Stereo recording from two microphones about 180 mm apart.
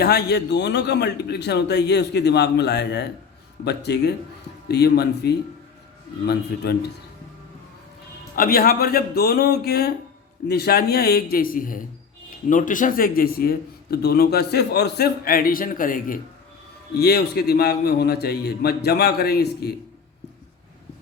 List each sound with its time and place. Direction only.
0.0 s a man's voice: 65° left (ahead or behind)
6.5 s a man's voice: 65° left (ahead or behind)
8.4 s a man's voice: 55° left (ahead or behind)
16.9 s a man's voice: 60° left (ahead or behind)